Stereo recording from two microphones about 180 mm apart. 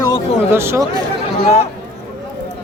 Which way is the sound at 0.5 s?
15° right (ahead or behind).